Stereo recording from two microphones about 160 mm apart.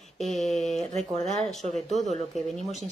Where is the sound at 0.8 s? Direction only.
40° right (ahead or behind).